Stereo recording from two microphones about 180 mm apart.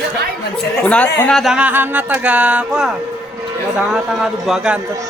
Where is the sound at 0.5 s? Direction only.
5° left (ahead or behind).